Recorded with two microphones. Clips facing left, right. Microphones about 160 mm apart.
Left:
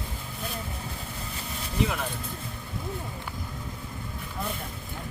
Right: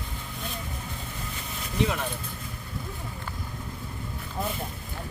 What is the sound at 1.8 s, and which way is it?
Speech, centre (ahead or behind).